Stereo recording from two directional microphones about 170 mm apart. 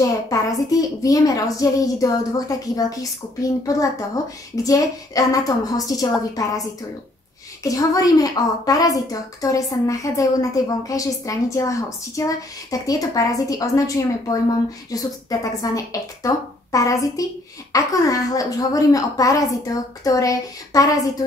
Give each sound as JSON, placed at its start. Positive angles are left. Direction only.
{"t": 0.0, "sound": "a woman's voice", "side_deg": 20}
{"t": 7.6, "sound": "a woman's voice", "side_deg": 20}